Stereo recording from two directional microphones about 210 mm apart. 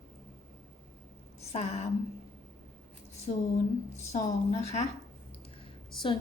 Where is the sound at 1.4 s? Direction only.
30° left (ahead or behind).